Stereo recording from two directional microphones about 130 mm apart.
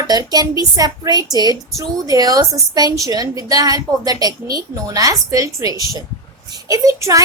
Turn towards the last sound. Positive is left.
turn(degrees=-25)  # may be behind; listen again after turning